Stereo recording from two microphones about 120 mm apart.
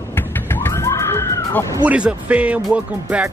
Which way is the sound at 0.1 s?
20° left (ahead or behind).